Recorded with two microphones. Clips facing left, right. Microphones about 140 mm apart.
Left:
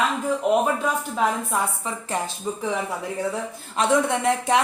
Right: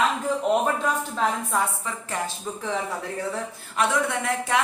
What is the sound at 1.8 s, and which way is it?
A woman's voice, 20° left (ahead or behind).